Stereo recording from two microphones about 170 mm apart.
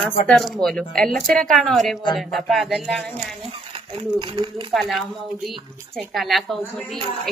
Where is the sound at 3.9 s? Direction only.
25° right (ahead or behind).